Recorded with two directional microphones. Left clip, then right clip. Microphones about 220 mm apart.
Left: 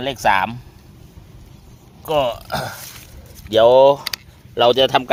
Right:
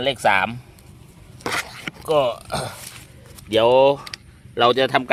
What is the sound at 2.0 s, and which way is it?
Speech, 5° right (ahead or behind).